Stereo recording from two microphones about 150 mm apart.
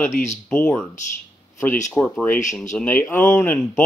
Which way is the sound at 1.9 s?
5° left (ahead or behind).